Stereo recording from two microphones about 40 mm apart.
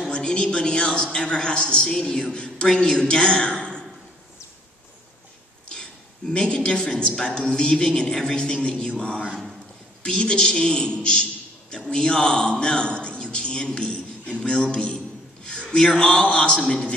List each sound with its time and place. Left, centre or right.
0.1 s a man's voice: left
5.7 s a sound: left
7.2 s a man's voice: left
10.0 s a man's voice: left